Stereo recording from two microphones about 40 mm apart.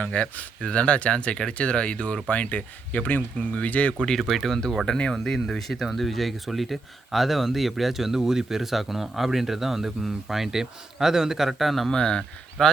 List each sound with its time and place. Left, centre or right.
0.0 s speech: left
3.9 s speech: centre
4.2 s speech: centre
11.9 s speech: centre